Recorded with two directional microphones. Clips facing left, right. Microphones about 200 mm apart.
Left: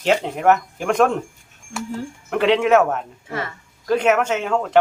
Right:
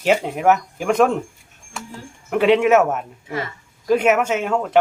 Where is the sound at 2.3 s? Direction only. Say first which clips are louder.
Right 1 dB; 5° right (ahead or behind).